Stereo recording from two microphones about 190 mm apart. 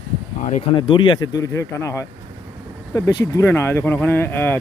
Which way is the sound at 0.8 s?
25° left (ahead or behind).